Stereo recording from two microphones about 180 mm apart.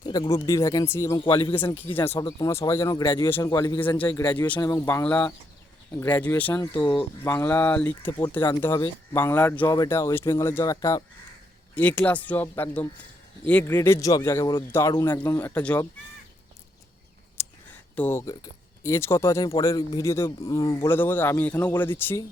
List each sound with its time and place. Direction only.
0.0 s speech: 20° left (ahead or behind)
1.2 s speech: 30° left (ahead or behind)
1.9 s speech: 10° left (ahead or behind)
6.6 s speech: 25° left (ahead or behind)
7.3 s speech: 15° left (ahead or behind)
11.7 s speech: 10° left (ahead or behind)
17.9 s speech: 10° left (ahead or behind)